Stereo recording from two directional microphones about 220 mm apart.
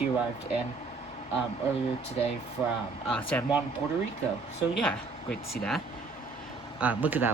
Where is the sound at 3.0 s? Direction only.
5° left (ahead or behind).